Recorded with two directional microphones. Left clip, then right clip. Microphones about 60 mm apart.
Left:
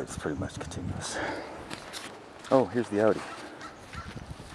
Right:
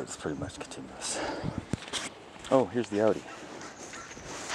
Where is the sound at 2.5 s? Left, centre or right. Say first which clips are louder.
Left 1 dB; centre.